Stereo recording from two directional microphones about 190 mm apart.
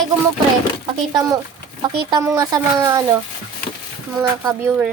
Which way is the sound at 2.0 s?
20° right (ahead or behind).